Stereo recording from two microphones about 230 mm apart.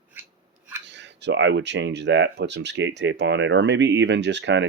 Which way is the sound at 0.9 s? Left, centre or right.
Right.